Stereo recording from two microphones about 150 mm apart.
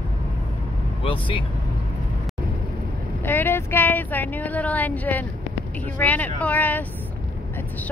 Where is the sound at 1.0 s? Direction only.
35° left (ahead or behind).